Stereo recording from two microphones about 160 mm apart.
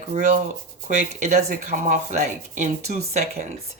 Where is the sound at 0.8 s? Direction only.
45° right (ahead or behind).